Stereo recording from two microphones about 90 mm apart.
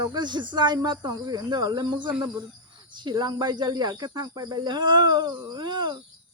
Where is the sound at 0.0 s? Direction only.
55° right (ahead or behind).